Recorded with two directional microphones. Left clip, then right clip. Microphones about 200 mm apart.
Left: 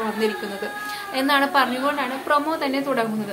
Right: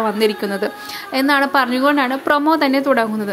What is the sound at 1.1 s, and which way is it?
A woman's voice, 30° right (ahead or behind).